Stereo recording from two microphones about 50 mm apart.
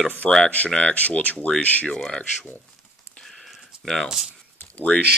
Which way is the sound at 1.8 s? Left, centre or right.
Centre.